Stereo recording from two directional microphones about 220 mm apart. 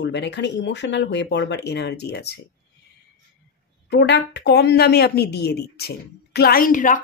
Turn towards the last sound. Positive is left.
turn(degrees=35)  # may be behind; listen again after turning